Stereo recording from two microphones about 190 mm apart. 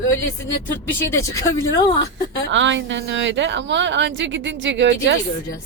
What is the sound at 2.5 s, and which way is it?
A woman's voice, 75° right (ahead or behind).